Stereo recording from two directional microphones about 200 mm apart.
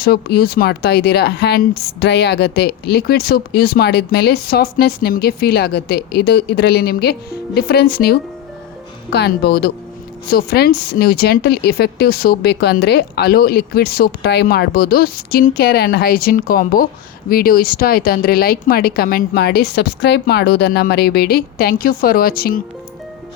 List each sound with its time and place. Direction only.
0.0 s speech: 50° left (ahead or behind)